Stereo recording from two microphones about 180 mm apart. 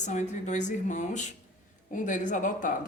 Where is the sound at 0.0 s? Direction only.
40° left (ahead or behind).